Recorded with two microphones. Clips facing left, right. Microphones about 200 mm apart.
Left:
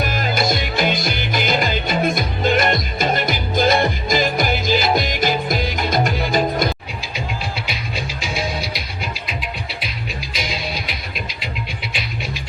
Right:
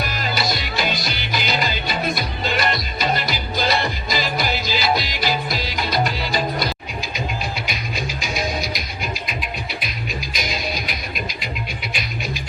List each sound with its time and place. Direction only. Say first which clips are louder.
0.0 s music: left 4 dB; 50° left (ahead or behind)
7.7 s music: even; 30° left (ahead or behind)
10.3 s music: left 1 dB; 30° left (ahead or behind)